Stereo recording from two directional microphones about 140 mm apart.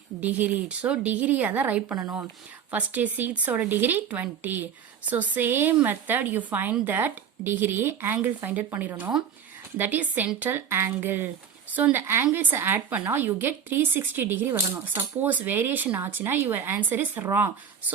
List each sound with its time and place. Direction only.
0.2 s a woman's voice: 10° right (ahead or behind)